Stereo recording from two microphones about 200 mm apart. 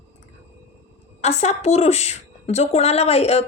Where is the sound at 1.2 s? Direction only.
35° left (ahead or behind).